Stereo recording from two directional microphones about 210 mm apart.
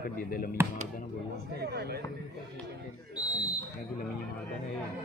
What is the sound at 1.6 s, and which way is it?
Speech, 50° right (ahead or behind).